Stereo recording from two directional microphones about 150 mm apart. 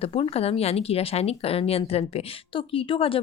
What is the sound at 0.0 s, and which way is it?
A woman's voice, 40° left (ahead or behind).